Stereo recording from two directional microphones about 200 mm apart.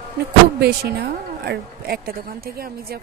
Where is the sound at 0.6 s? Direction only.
55° right (ahead or behind).